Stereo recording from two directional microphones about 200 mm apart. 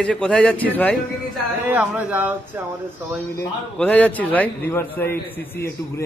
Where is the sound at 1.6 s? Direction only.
10° right (ahead or behind).